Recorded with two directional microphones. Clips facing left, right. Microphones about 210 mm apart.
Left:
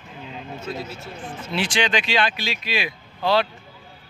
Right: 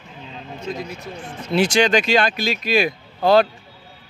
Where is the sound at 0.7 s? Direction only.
15° right (ahead or behind).